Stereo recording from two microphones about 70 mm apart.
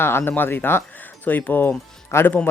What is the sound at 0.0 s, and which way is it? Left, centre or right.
Speech, left.